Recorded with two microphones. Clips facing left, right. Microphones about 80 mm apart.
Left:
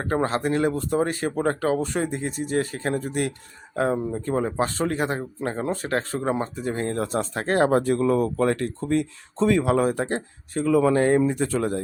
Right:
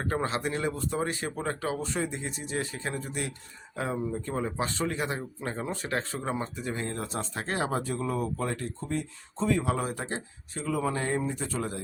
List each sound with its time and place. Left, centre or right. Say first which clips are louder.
0.0 s speech: left 6 dB; left
11.2 s speech: left 9 dB; left